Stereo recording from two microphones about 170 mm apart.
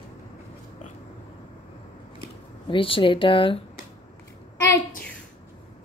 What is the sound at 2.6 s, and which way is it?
Speech, 30° left (ahead or behind).